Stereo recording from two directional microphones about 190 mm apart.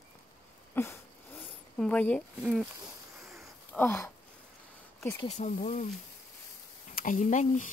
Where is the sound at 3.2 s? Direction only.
Centre (ahead or behind).